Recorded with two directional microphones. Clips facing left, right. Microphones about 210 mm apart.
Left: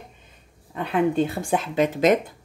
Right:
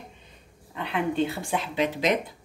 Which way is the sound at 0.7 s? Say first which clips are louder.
Left 5 dB; 45° left (ahead or behind).